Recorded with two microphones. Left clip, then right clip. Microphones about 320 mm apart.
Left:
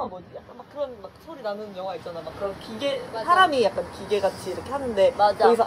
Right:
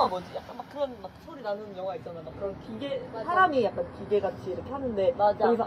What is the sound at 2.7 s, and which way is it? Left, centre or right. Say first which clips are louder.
Speech: left 9 dB; left.